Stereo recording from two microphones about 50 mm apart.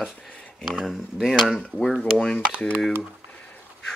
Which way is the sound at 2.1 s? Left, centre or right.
Centre.